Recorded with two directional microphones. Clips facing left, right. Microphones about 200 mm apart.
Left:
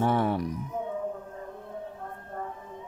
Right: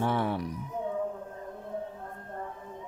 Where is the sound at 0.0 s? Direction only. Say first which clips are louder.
Left 3 dB; 45° left (ahead or behind).